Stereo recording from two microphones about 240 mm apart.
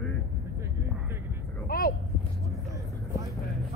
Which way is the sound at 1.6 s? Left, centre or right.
Left.